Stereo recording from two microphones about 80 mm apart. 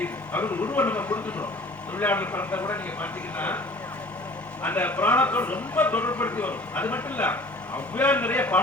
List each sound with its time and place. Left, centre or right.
0.0 s a man's voice: left
4.6 s a man's voice: left